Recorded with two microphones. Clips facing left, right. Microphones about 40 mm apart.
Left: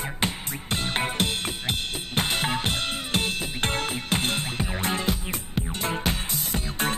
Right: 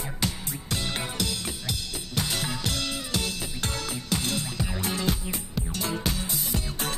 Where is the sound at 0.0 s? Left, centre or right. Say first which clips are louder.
Left 3 dB; left.